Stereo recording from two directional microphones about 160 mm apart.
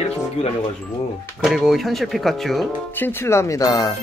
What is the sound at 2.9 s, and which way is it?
Speech, 15° left (ahead or behind).